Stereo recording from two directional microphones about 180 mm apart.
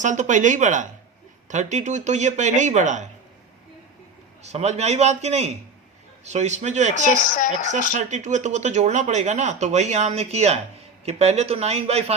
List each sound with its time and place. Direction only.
0.0 s speech: 45° right (ahead or behind)
4.4 s speech: 35° right (ahead or behind)
7.0 s speech: 50° left (ahead or behind)
7.9 s speech: 40° right (ahead or behind)